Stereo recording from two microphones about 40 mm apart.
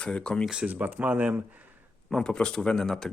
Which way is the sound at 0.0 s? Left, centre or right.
Left.